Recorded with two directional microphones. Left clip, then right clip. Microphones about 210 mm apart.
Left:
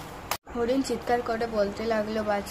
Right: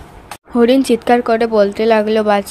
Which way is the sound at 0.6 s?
45° right (ahead or behind).